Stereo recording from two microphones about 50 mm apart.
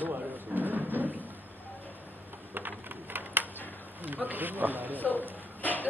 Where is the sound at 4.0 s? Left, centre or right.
Right.